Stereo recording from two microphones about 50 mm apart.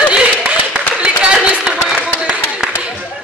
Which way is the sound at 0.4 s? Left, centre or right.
Right.